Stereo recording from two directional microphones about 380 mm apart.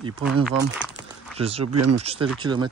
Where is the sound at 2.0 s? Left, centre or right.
Centre.